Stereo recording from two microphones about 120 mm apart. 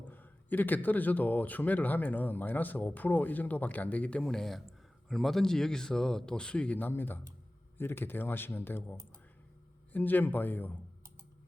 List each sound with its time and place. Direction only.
0.1 s speech: 15° left (ahead or behind)